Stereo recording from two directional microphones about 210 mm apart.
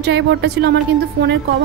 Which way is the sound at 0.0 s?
55° right (ahead or behind).